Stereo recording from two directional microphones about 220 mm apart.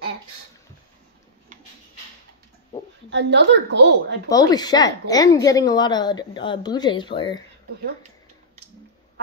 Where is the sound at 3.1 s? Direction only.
50° right (ahead or behind).